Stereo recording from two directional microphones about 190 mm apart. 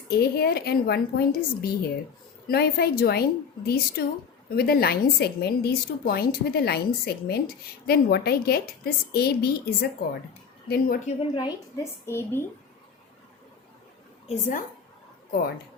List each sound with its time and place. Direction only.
0.1 s a woman's voice: 55° left (ahead or behind)
11.2 s a woman's voice: 25° left (ahead or behind)
12.0 s a woman's voice: 15° left (ahead or behind)
14.3 s a woman's voice: 40° left (ahead or behind)